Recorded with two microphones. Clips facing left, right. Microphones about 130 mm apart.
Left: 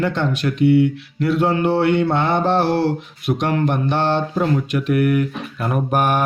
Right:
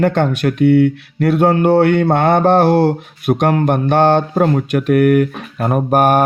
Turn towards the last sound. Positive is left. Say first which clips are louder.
# right 6 dB
turn(degrees=-45)  # may be behind; listen again after turning